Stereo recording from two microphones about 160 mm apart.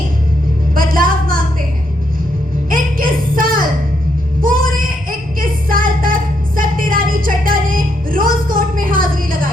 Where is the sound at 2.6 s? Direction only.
60° right (ahead or behind).